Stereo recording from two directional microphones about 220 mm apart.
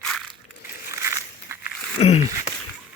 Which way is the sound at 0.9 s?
15° right (ahead or behind).